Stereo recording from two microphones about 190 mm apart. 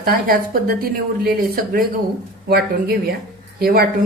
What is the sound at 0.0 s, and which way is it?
Speech, 50° right (ahead or behind).